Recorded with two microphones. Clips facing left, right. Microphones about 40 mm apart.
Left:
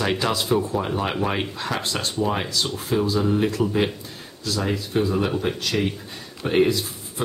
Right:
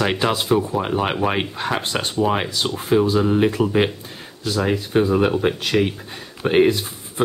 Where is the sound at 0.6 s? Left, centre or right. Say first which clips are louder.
Right 2 dB; centre.